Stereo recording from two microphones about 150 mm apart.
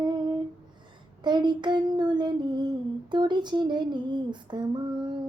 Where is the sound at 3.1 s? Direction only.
30° right (ahead or behind).